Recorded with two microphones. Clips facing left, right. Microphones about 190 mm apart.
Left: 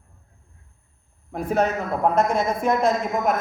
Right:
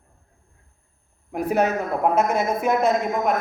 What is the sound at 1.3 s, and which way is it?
A woman's voice, 10° right (ahead or behind).